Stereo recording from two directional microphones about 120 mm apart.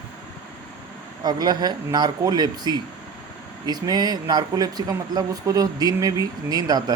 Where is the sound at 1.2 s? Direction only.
35° right (ahead or behind).